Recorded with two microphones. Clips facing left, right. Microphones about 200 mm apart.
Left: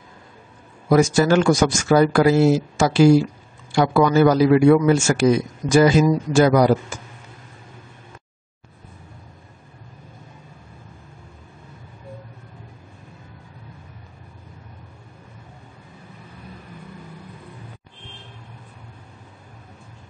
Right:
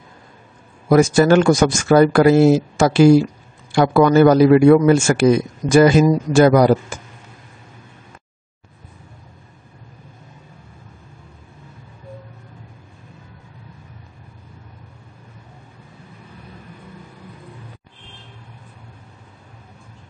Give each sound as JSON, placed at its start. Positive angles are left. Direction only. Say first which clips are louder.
{"t": 0.8, "sound": "a man's voice", "louder": "right 3 dB", "side_deg": -55}